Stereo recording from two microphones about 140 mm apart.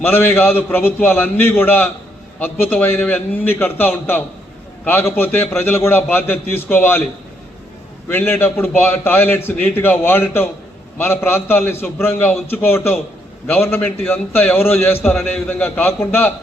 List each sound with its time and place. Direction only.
0.0 s a man's voice: 15° left (ahead or behind)
8.1 s a man's voice: 15° left (ahead or behind)